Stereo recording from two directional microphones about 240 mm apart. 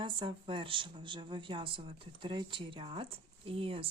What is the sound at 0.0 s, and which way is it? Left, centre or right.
Speech, right.